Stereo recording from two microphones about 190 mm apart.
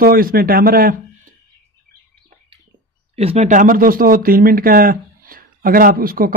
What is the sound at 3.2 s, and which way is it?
Speech, 35° right (ahead or behind).